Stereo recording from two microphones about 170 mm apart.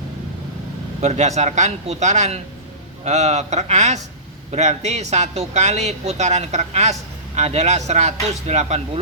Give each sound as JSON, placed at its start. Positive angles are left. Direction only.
{"t": 1.0, "sound": "speech", "side_deg": -40}